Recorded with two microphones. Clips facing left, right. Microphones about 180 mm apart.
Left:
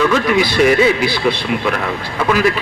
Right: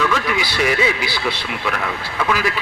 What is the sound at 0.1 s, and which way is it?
A man's voice, 45° left (ahead or behind).